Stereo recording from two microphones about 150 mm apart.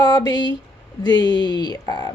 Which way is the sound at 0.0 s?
25° left (ahead or behind).